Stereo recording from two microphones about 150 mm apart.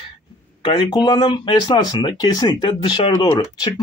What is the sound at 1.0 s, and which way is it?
Speech, 30° left (ahead or behind).